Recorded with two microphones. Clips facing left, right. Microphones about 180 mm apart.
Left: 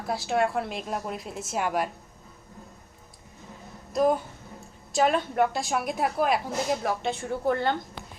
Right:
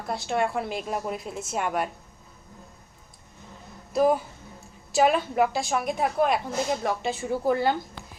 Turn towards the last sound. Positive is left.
turn(degrees=-5)  # may be behind; listen again after turning